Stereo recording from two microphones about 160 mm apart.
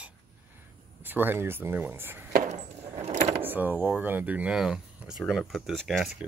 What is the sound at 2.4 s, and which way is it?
Keys jangling, 45° right (ahead or behind).